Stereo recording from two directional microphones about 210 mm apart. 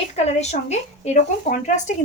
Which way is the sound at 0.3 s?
30° left (ahead or behind).